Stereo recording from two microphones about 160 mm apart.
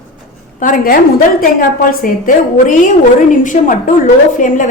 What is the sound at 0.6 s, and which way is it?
A woman's voice, 55° left (ahead or behind).